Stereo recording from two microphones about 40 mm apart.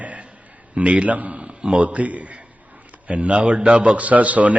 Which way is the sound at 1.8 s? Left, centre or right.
Right.